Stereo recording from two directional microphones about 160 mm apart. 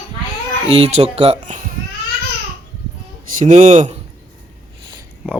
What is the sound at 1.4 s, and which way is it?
Speech, 50° right (ahead or behind).